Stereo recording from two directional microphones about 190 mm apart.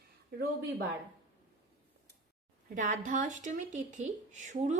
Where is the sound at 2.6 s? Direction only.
40° right (ahead or behind).